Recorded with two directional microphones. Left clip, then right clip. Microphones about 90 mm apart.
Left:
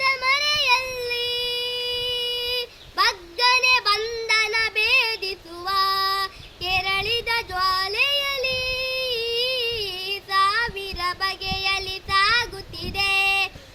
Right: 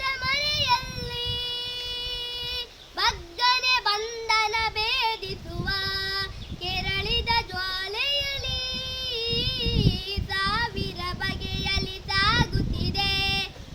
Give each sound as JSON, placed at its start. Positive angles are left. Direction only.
{"t": 0.0, "sound": "child singing", "side_deg": -25}